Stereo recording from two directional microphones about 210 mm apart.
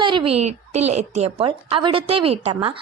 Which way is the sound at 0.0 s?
25° right (ahead or behind).